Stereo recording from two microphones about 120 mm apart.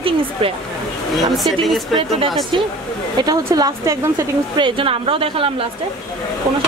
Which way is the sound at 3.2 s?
40° right (ahead or behind).